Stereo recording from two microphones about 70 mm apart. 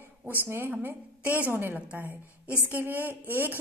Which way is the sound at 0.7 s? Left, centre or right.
Right.